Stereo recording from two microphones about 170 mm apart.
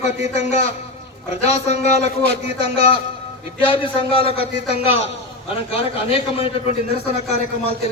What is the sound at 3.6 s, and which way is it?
Speech, 30° left (ahead or behind).